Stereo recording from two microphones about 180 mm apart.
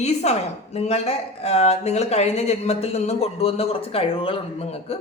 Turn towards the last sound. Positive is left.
turn(degrees=30)  # may be behind; listen again after turning